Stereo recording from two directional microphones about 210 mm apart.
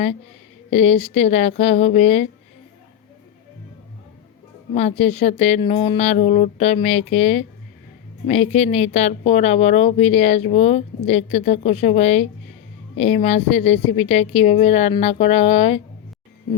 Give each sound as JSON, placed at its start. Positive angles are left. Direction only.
{"t": 0.7, "sound": "speech", "side_deg": 30}
{"t": 4.7, "sound": "a woman's voice", "side_deg": 30}